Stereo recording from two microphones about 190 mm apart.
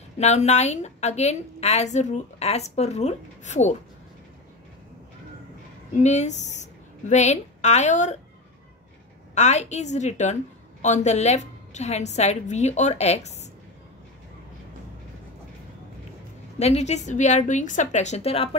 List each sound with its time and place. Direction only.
0.2 s a woman's voice: 35° left (ahead or behind)
5.9 s a woman's voice: 35° left (ahead or behind)
9.3 s a woman's voice: 35° left (ahead or behind)
16.5 s a woman's voice: 35° left (ahead or behind)